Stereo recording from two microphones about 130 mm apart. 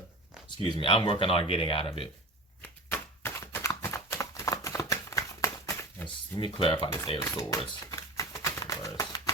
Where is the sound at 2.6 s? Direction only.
15° left (ahead or behind).